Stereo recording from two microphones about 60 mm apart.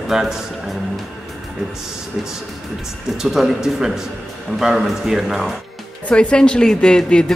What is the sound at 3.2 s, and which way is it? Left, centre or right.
A man's voice, centre.